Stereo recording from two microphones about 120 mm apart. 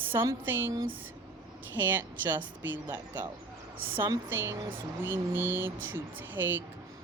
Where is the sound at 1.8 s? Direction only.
15° right (ahead or behind).